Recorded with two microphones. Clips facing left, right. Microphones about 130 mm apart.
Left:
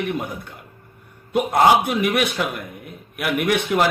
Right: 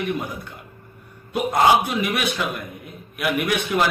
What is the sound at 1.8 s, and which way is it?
A man's voice, 55° left (ahead or behind).